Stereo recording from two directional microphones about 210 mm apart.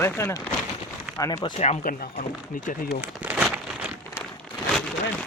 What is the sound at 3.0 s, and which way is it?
Crumpling, 5° right (ahead or behind).